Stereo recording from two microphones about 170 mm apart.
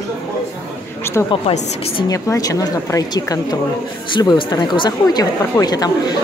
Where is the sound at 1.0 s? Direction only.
15° left (ahead or behind).